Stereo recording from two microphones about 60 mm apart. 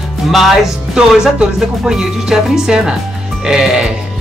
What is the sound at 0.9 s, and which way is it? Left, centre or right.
Speech, centre.